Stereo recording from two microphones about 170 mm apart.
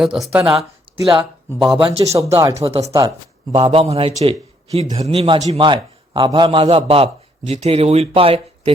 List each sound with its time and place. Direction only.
0.0 s speech: centre (ahead or behind)
1.0 s speech: 25° right (ahead or behind)
1.5 s speech: centre (ahead or behind)
1.8 s a man's voice: 35° right (ahead or behind)
2.1 s speech: 20° right (ahead or behind)
3.5 s a man's voice: 35° right (ahead or behind)